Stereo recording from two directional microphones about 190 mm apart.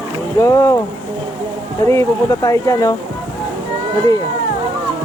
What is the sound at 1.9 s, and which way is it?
Speech, 15° left (ahead or behind).